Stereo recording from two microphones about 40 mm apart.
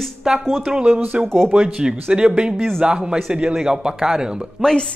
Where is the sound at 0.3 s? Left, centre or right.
Centre.